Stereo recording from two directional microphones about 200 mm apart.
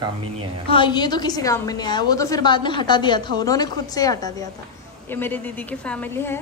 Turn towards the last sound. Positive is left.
turn(degrees=10)  # may be behind; listen again after turning